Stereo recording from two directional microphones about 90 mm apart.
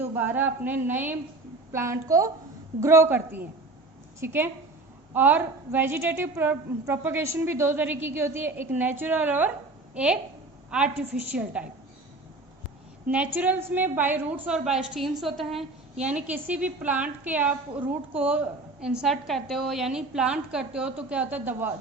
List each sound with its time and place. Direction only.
0.1 s a woman's voice: 20° right (ahead or behind)
13.1 s a woman's voice: 15° right (ahead or behind)
14.4 s a woman's voice: 5° right (ahead or behind)
16.0 s a woman's voice: 15° right (ahead or behind)